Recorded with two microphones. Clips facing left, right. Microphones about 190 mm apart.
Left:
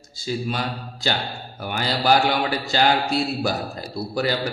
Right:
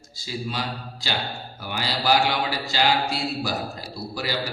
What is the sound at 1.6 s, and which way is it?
A man's voice, 55° left (ahead or behind).